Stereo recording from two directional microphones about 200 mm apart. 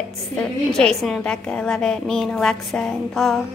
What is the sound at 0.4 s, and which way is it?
A woman's voice, 5° left (ahead or behind).